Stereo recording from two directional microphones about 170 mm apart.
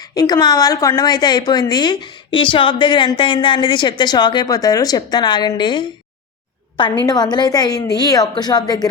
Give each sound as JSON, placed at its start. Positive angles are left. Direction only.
{"t": 0.1, "sound": "a woman's voice", "side_deg": 25}
{"t": 7.0, "sound": "a woman's voice", "side_deg": 25}